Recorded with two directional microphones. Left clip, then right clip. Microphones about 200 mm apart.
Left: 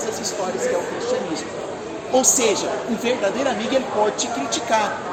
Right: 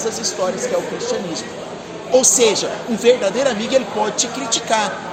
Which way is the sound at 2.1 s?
35° right (ahead or behind).